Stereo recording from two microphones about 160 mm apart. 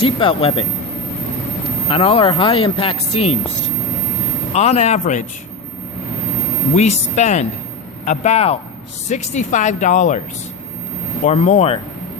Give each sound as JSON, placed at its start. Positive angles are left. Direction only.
{"t": 0.0, "sound": "speech", "side_deg": 35}
{"t": 1.9, "sound": "speech", "side_deg": 35}
{"t": 4.5, "sound": "speech", "side_deg": 45}
{"t": 6.7, "sound": "speech", "side_deg": 45}
{"t": 11.2, "sound": "speech", "side_deg": 45}